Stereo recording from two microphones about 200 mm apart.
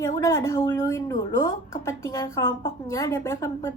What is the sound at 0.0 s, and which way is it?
A woman's voice, 15° left (ahead or behind).